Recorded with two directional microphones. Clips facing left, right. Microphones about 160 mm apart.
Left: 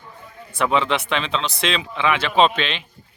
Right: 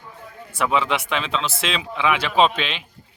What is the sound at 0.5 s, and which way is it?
Speech, 5° right (ahead or behind).